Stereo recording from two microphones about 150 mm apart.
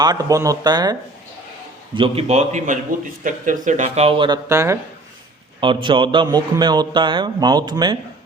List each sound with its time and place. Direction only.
0.0 s speech: 25° right (ahead or behind)
2.0 s speech: 45° right (ahead or behind)
4.3 s speech: 20° right (ahead or behind)
5.5 s speech: 35° right (ahead or behind)